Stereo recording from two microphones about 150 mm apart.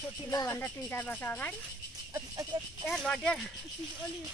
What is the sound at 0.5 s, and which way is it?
Speech, 10° left (ahead or behind).